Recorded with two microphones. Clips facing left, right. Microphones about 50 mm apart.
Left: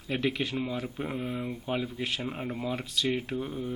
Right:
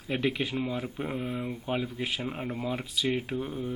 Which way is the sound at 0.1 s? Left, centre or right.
Centre.